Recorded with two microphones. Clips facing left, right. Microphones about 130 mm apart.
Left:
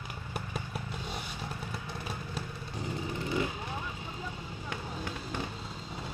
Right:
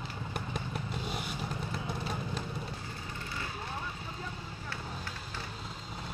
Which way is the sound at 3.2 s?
20° left (ahead or behind).